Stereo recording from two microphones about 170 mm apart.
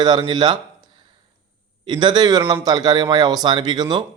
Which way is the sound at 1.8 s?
25° right (ahead or behind).